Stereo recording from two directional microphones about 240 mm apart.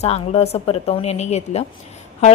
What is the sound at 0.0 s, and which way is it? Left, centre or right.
A woman's voice, left.